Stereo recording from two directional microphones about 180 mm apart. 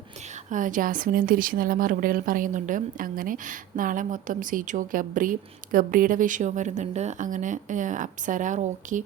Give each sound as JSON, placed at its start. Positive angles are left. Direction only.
{"t": 0.5, "sound": "a woman's voice", "side_deg": -45}